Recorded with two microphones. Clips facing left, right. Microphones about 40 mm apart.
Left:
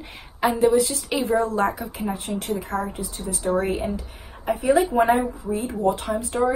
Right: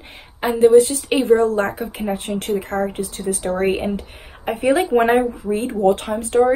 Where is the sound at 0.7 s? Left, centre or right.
Right.